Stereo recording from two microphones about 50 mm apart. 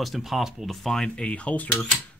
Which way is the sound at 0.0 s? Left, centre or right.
Centre.